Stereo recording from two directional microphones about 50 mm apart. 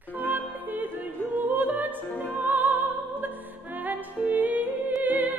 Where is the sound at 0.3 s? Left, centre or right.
Right.